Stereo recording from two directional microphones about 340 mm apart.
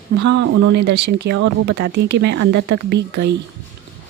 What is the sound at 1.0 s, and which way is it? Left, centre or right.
Speech, right.